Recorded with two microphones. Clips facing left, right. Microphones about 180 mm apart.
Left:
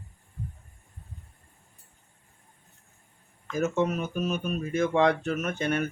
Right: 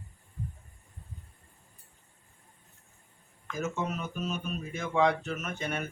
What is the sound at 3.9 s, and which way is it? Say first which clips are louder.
Speech: left 6 dB; 50° left (ahead or behind).